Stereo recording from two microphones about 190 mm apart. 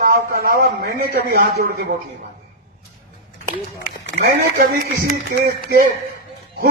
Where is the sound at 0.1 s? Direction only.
50° right (ahead or behind).